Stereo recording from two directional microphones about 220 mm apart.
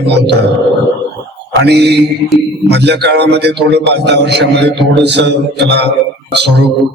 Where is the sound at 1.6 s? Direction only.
50° right (ahead or behind).